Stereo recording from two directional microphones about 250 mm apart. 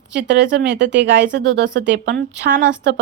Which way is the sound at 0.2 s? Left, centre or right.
Right.